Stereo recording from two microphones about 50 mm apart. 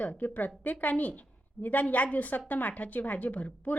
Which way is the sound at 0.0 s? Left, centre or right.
Left.